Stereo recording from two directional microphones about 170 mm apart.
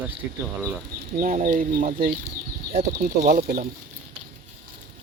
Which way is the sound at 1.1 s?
50° right (ahead or behind).